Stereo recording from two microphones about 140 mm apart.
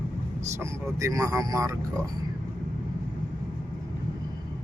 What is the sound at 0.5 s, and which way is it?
Speech, 20° right (ahead or behind).